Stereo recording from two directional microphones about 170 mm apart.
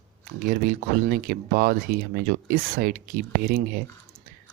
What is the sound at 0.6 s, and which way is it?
Speech, 65° right (ahead or behind).